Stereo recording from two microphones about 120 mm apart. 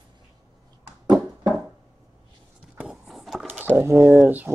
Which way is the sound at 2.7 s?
5° right (ahead or behind).